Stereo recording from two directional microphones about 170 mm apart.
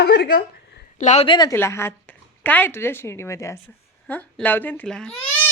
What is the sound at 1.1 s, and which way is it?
Speech, 35° left (ahead or behind).